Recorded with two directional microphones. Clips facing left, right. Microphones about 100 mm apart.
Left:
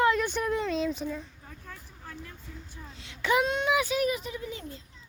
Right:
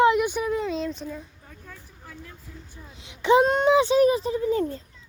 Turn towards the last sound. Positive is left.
turn(degrees=-35)  # may be behind; listen again after turning